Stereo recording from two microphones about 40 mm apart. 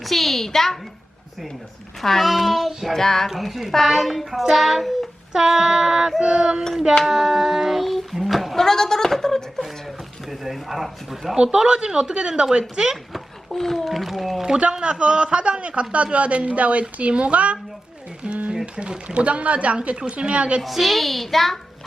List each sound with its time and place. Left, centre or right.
0.0 s a woman's voice: centre
2.0 s child singing: centre
3.2 s child singing: centre
5.3 s female singing: centre
7.1 s female singing: centre
7.9 s speech: centre
8.6 s speech: centre
10.2 s child singing: centre
11.5 s speech: right
13.5 s child singing: centre
14.7 s a woman's voice: right
20.6 s child singing: centre